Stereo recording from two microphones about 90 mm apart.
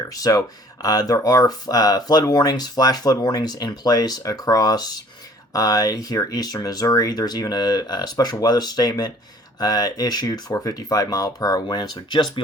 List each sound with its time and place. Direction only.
0.1 s speech: 45° left (ahead or behind)
10.5 s speech: 40° left (ahead or behind)